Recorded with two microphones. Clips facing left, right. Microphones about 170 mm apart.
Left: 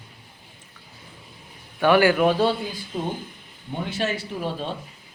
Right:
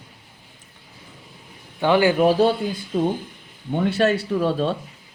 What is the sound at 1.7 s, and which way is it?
Speech, 20° right (ahead or behind).